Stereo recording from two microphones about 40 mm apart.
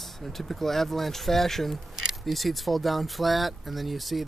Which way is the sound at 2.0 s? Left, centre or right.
Centre.